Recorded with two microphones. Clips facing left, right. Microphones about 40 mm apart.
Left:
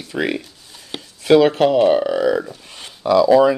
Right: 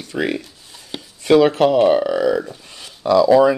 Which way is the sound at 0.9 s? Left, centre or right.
Centre.